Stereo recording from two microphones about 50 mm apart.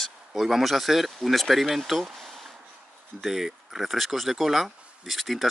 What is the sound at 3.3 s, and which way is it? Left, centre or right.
Speech, centre.